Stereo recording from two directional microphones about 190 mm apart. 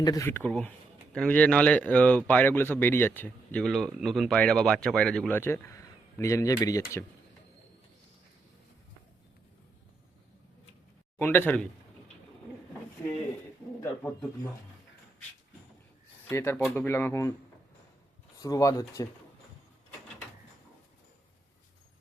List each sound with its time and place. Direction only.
0.0 s speech: 15° left (ahead or behind)
11.2 s speech: 10° left (ahead or behind)
16.3 s speech: 15° left (ahead or behind)
18.3 s speech: 20° left (ahead or behind)